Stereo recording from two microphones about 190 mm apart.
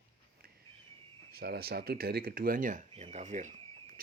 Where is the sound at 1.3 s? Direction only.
55° right (ahead or behind); by 4.0 s 40° right (ahead or behind).